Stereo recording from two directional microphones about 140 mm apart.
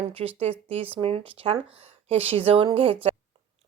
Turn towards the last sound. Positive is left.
turn(degrees=-40)  # may be behind; listen again after turning